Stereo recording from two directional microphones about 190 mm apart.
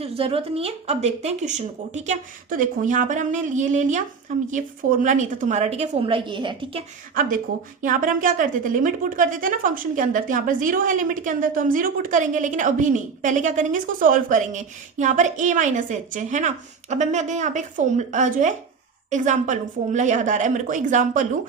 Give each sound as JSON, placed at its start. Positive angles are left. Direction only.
{"t": 0.0, "sound": "speech", "side_deg": -30}
{"t": 7.1, "sound": "speech", "side_deg": -45}